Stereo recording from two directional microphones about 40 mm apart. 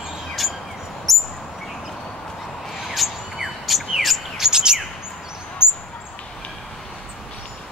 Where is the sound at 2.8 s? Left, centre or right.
Centre.